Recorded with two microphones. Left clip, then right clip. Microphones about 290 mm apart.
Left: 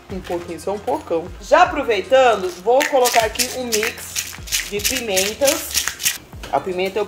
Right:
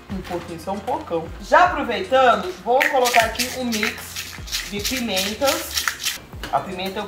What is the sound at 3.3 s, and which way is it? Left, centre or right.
Speech, left.